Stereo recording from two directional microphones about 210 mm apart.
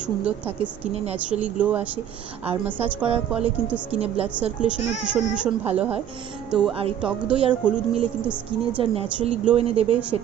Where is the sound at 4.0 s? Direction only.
30° right (ahead or behind).